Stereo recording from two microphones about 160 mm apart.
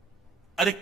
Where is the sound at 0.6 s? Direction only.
Centre (ahead or behind).